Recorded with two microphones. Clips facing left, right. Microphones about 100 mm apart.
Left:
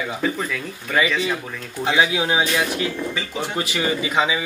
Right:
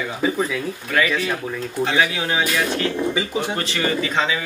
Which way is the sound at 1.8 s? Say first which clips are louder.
Left 2 dB; 15° left (ahead or behind).